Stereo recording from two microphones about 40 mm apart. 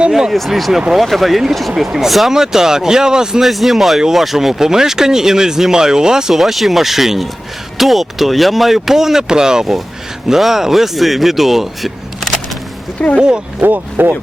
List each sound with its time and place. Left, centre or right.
0.1 s speech: centre
3.4 s speech: centre
6.3 s speech: centre
13.0 s speech: centre
13.6 s speech: right